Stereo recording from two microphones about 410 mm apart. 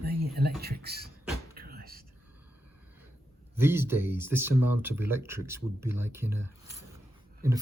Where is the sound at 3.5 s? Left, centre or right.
Centre.